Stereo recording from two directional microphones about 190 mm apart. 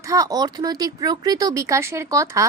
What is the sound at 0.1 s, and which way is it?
A woman's voice, 20° right (ahead or behind).